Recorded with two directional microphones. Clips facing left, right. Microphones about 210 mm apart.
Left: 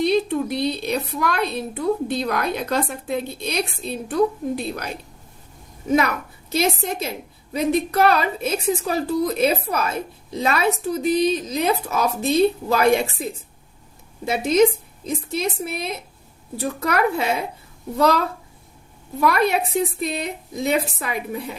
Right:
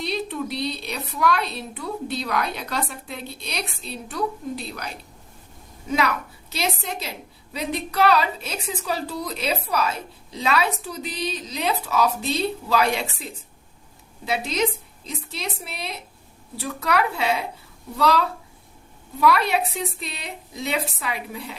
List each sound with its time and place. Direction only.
0.0 s a woman's voice: 50° left (ahead or behind)
6.5 s a woman's voice: 50° left (ahead or behind)
14.3 s a woman's voice: 50° left (ahead or behind)
19.2 s a woman's voice: 50° left (ahead or behind)